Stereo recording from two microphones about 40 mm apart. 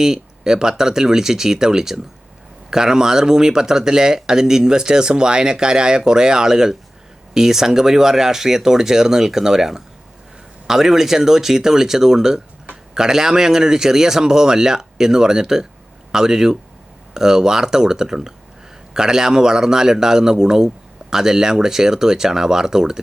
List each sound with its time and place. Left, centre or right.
0.0 s speech: centre